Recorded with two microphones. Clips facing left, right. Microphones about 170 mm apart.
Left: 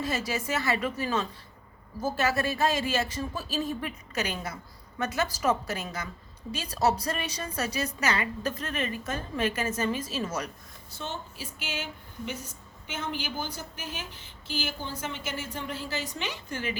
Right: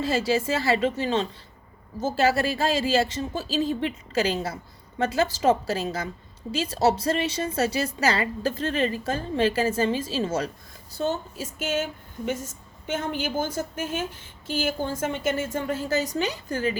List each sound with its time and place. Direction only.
0.0 s a woman's voice: 30° right (ahead or behind)
10.9 s a woman's voice: 40° right (ahead or behind)